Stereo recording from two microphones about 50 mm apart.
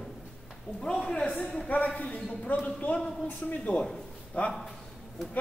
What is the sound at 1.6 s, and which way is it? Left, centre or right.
A man's voice, left.